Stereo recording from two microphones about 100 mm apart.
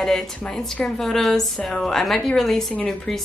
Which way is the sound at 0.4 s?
10° left (ahead or behind).